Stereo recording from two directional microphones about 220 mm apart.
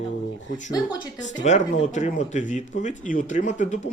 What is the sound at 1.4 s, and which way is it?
Speech, 35° left (ahead or behind).